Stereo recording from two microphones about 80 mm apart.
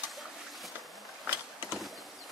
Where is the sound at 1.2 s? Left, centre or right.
Centre.